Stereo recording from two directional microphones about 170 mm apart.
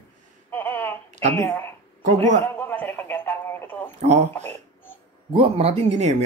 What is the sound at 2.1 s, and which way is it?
Speech, 45° right (ahead or behind).